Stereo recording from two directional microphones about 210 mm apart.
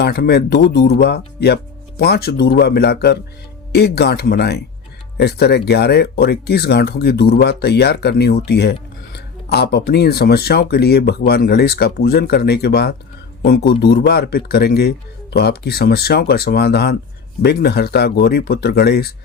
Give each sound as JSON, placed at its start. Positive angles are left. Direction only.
{"t": 0.0, "sound": "a man's voice", "side_deg": 50}